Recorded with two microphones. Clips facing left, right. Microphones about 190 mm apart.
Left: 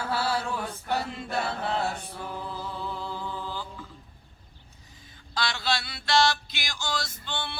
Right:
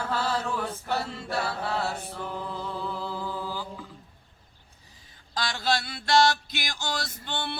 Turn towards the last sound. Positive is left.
turn(degrees=-55)  # may be behind; listen again after turning